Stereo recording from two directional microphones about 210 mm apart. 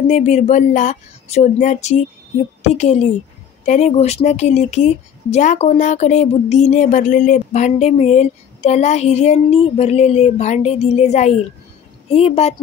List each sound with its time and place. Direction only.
0.1 s speech: 35° left (ahead or behind)